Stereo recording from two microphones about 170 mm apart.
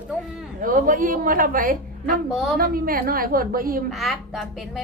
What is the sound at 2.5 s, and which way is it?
A woman's voice, 60° right (ahead or behind).